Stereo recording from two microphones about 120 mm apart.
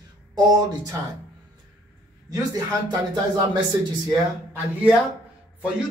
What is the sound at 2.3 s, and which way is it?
Speech, 35° right (ahead or behind).